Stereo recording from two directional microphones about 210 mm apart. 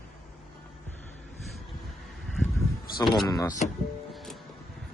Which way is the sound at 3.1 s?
15° left (ahead or behind).